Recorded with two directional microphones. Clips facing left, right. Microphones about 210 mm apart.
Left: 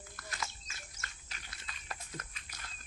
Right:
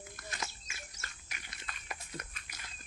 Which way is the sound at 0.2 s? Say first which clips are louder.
Left 1 dB; 20° right (ahead or behind).